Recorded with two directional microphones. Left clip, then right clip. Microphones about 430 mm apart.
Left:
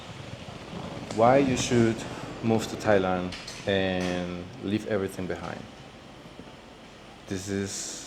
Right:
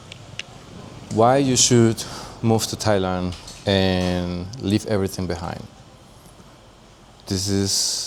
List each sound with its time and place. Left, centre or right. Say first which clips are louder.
1.2 s speech: right 5 dB; right
7.3 s speech: right 9 dB; right